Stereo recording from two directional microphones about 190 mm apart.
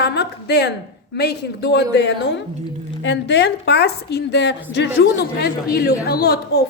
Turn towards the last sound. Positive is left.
turn(degrees=55)  # may be behind; listen again after turning